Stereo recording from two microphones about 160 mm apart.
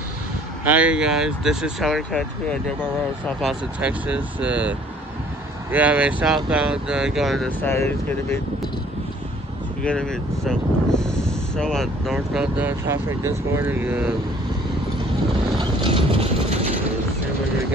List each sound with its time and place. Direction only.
0.7 s speech: 10° right (ahead or behind)
3.8 s speech: 10° right (ahead or behind)
7.6 s speech: 15° left (ahead or behind)
9.8 s speech: 5° left (ahead or behind)
15.5 s a sound: 30° right (ahead or behind)